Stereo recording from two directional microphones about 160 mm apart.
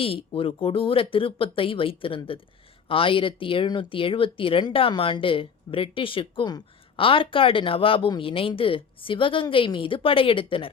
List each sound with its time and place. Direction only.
0.0 s speech: 35° left (ahead or behind)